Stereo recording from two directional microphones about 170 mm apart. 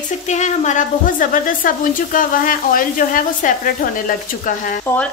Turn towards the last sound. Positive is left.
turn(degrees=55)  # may be behind; listen again after turning